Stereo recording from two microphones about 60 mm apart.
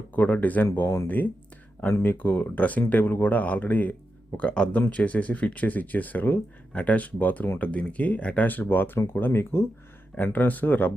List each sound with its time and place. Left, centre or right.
0.1 s speech: left
10.3 s speech: left